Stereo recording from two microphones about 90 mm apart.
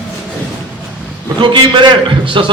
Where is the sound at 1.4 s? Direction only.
60° right (ahead or behind).